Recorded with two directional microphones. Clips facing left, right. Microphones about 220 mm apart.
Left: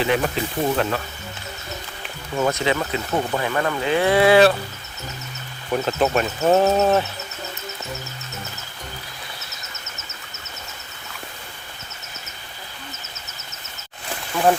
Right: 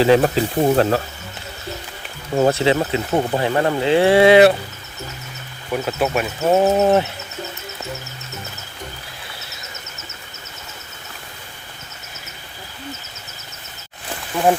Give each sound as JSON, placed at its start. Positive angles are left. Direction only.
{"t": 0.0, "sound": "speech", "side_deg": -35}
{"t": 2.3, "sound": "speech", "side_deg": -35}
{"t": 5.7, "sound": "speech", "side_deg": -10}